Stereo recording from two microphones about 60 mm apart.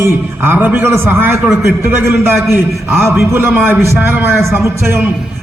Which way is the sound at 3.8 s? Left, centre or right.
Right.